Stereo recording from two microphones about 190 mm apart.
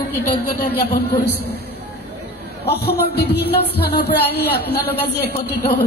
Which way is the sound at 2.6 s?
60° left (ahead or behind).